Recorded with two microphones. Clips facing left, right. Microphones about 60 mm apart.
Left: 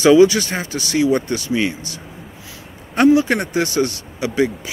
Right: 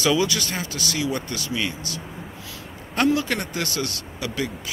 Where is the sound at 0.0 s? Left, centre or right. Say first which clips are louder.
Left 11 dB; left.